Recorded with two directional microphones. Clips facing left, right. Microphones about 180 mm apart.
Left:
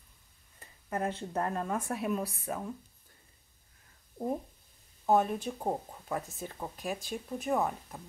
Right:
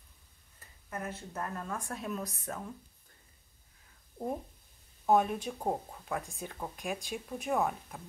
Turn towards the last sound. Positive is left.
turn(degrees=0)  # may be behind; listen again after turning